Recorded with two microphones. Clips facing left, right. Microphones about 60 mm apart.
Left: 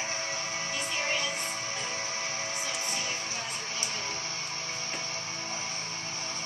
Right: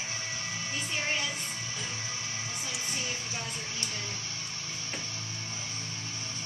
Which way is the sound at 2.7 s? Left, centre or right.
Left.